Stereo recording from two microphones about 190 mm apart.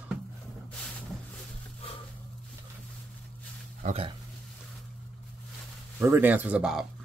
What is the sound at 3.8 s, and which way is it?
Speech, 30° right (ahead or behind).